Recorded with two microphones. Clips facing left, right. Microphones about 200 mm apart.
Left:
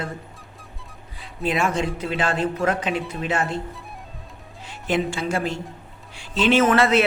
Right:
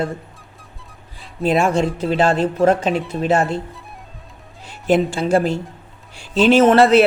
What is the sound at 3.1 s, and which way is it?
Speech, 40° right (ahead or behind).